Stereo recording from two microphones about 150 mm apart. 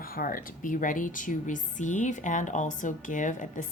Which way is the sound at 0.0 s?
75° left (ahead or behind).